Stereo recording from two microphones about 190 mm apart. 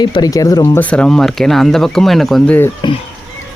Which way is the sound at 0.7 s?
5° left (ahead or behind).